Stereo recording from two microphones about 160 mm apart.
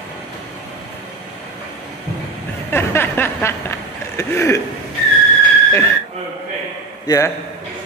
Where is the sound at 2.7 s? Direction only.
15° left (ahead or behind).